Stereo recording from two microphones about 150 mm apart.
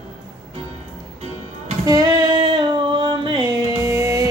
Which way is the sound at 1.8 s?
25° right (ahead or behind).